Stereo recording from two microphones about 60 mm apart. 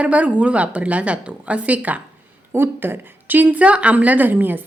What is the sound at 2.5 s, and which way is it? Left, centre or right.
A woman's voice, right.